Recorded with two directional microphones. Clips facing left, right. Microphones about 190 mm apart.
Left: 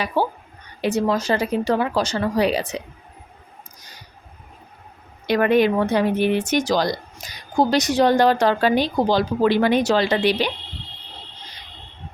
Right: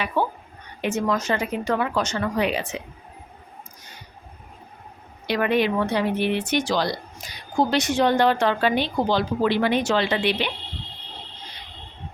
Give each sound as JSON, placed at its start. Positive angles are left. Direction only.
{"t": 0.0, "sound": "a woman's voice", "side_deg": 30}
{"t": 5.2, "sound": "speech", "side_deg": 45}